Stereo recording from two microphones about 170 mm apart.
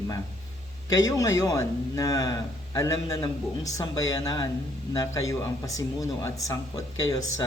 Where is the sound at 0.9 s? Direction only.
20° left (ahead or behind).